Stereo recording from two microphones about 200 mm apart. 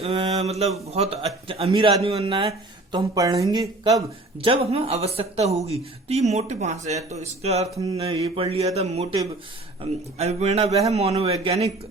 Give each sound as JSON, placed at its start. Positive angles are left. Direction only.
{"t": 0.0, "sound": "mantra", "side_deg": -30}
{"t": 0.9, "sound": "speech", "side_deg": -30}
{"t": 4.4, "sound": "speech", "side_deg": -25}
{"t": 10.2, "sound": "speech", "side_deg": -30}